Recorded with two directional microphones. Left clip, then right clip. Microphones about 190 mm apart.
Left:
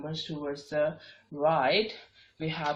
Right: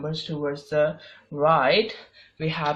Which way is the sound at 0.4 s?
35° right (ahead or behind).